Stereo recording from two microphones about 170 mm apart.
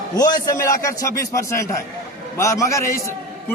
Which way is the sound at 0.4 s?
20° left (ahead or behind).